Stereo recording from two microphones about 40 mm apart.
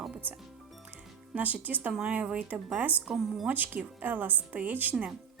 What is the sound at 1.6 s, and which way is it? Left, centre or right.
A woman's voice, right.